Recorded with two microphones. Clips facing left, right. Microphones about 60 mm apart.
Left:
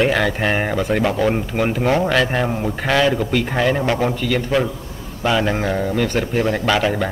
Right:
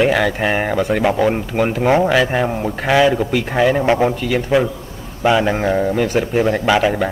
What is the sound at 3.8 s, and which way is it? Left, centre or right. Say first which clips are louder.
Speech: right 4 dB; right.